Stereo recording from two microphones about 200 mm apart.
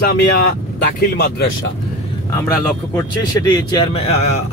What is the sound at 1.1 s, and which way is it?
Speech, 55° left (ahead or behind).